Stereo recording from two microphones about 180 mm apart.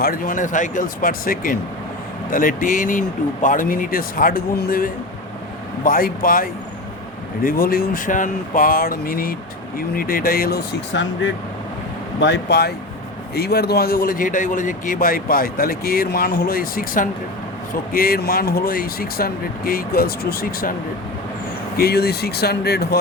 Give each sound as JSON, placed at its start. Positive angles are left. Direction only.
{"t": 0.0, "sound": "a man's voice", "side_deg": 50}
{"t": 21.8, "sound": "speech", "side_deg": 60}